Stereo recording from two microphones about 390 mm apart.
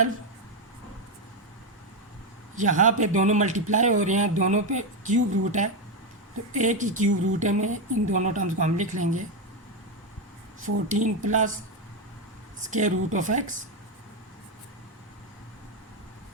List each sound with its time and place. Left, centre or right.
2.6 s a woman's voice: centre
10.7 s speech: right
11.0 s a woman's voice: centre
12.6 s a woman's voice: centre